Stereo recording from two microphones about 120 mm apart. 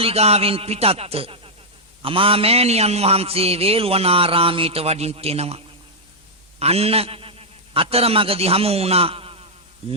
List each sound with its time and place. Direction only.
0.0 s a man's voice: 60° right (ahead or behind)